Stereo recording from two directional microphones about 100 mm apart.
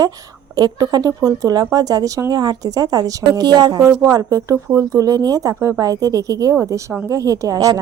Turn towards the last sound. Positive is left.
turn(degrees=-35)  # may be behind; listen again after turning